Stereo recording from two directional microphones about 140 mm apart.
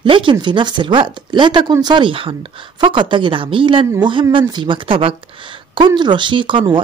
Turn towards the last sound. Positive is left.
turn(degrees=-35)  # may be behind; listen again after turning